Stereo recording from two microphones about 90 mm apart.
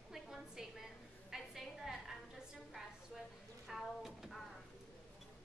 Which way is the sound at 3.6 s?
Centre (ahead or behind).